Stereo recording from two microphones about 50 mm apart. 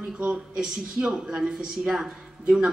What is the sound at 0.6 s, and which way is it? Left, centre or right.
Speech, centre.